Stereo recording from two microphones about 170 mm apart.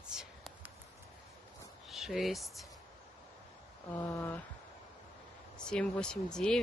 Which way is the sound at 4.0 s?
10° left (ahead or behind).